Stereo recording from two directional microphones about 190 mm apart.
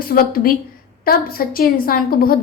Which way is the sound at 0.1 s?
50° left (ahead or behind).